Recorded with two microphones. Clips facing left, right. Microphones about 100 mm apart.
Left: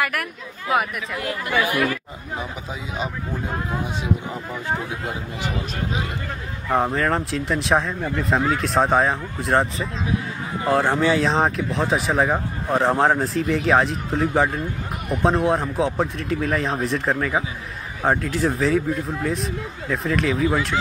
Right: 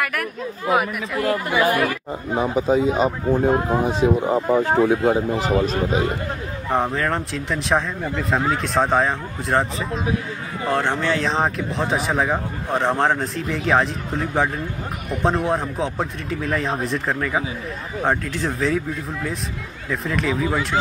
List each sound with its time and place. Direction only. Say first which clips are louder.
0.0 s a man's voice: right 1 dB; centre (ahead or behind)
1.2 s speech: right 4 dB; 40° right (ahead or behind)
6.7 s a man's voice: left 1 dB; centre (ahead or behind)